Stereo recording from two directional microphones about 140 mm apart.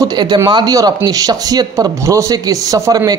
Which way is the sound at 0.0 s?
30° right (ahead or behind).